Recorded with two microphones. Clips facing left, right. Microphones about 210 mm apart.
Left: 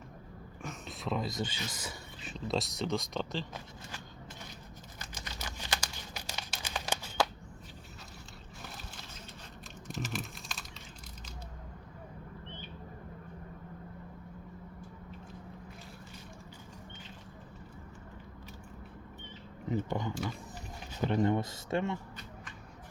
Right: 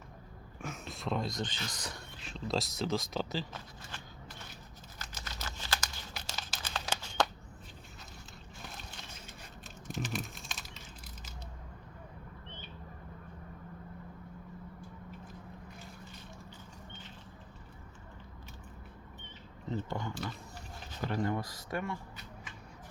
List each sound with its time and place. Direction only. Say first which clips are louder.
0.6 s speech: even; centre (ahead or behind)
4.9 s crumpling: left 1 dB; 15° left (ahead or behind)
9.9 s typing: right 1 dB; centre (ahead or behind)
19.6 s a sound: left 4 dB; 15° left (ahead or behind)
21.0 s speech: left 5 dB; 20° left (ahead or behind)